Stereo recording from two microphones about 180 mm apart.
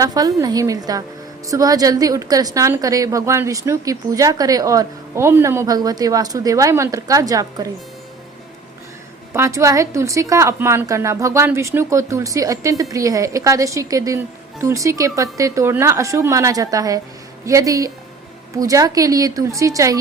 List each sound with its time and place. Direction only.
0.0 s a woman's voice: 20° right (ahead or behind)
9.3 s a woman's voice: 15° right (ahead or behind)